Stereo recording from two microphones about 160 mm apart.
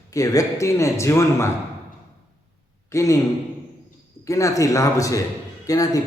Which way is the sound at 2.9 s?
20° left (ahead or behind).